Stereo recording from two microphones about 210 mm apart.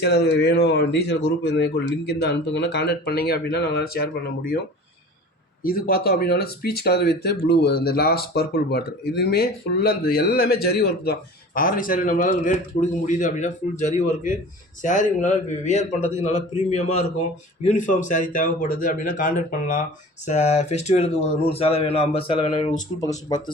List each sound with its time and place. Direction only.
0.0 s speech: 50° left (ahead or behind)
5.6 s a man's voice: 45° left (ahead or behind); by 23.4 s 15° left (ahead or behind)